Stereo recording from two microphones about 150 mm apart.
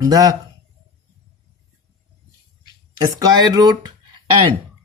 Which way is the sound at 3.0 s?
25° right (ahead or behind).